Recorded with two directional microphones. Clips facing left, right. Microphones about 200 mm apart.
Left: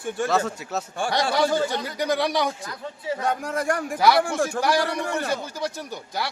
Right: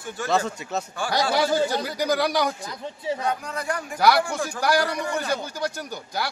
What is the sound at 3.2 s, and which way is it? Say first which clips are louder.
Speech: left 2 dB; 50° left (ahead or behind).